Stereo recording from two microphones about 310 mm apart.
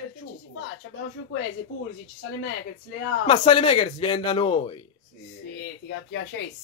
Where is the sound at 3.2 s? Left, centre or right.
Centre.